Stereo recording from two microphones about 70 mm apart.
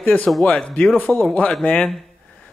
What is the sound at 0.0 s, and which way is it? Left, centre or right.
A man's voice, left.